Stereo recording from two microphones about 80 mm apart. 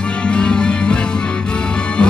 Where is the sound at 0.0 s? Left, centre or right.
Centre.